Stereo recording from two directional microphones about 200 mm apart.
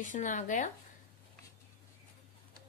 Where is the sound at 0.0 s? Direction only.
40° left (ahead or behind).